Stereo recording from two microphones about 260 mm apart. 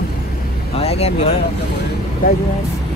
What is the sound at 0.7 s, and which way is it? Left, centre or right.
Speech, left.